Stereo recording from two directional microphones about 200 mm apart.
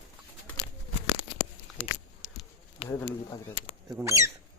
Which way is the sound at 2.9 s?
15° left (ahead or behind).